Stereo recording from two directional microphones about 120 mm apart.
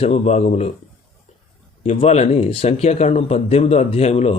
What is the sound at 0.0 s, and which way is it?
Speech, 65° left (ahead or behind).